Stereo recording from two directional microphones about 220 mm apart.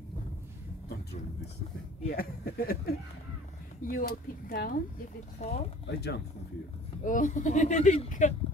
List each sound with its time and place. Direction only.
2.1 s speech: 45° left (ahead or behind)
5.4 s speech: 30° left (ahead or behind)
5.9 s speech: 45° left (ahead or behind)
7.1 s speech: 35° left (ahead or behind)